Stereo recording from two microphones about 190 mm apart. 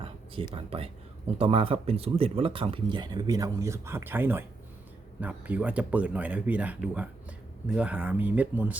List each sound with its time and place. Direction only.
0.5 s speech: 30° right (ahead or behind); by 8.8 s 10° right (ahead or behind)